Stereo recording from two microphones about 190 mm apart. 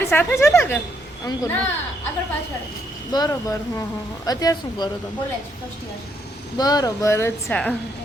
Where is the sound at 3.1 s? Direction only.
20° left (ahead or behind).